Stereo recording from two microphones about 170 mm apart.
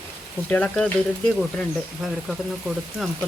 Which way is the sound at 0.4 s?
10° left (ahead or behind).